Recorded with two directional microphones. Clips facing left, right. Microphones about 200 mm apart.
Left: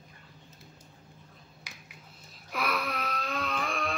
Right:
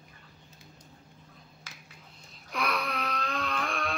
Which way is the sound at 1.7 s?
15° left (ahead or behind).